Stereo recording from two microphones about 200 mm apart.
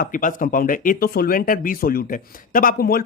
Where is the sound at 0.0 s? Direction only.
40° left (ahead or behind).